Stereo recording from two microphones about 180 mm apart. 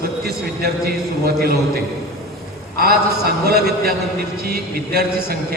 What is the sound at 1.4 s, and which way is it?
A man's voice, 60° right (ahead or behind).